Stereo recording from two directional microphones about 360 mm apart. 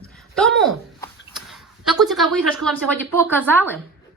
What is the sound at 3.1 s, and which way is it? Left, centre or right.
Speech, centre.